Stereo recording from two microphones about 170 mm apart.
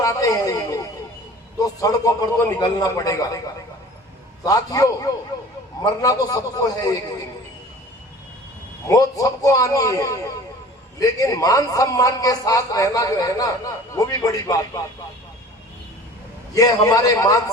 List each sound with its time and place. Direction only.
0.0 s a sound: 20° left (ahead or behind)
1.6 s a man's voice: 20° left (ahead or behind)
8.9 s a man's voice: 20° left (ahead or behind)
16.6 s a man's voice: 20° left (ahead or behind)